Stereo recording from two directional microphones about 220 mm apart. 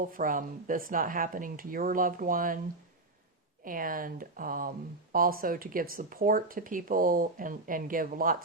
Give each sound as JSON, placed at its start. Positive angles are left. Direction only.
{"t": 0.0, "sound": "speech", "side_deg": -40}
{"t": 3.6, "sound": "speech", "side_deg": -40}